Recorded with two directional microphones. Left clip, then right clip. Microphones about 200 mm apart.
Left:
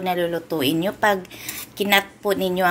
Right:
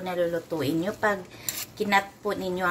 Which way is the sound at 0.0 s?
25° left (ahead or behind).